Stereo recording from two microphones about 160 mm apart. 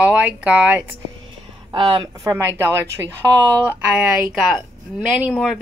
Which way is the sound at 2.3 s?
15° right (ahead or behind).